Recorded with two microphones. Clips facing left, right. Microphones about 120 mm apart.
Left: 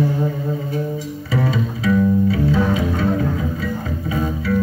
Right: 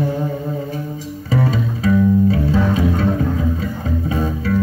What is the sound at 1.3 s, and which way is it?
Music, 35° right (ahead or behind).